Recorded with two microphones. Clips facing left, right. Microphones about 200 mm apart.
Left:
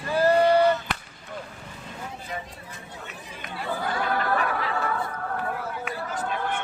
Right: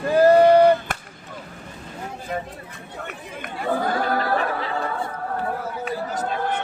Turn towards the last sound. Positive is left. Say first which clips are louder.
# right 4 dB
turn(degrees=-40)  # may be behind; listen again after turning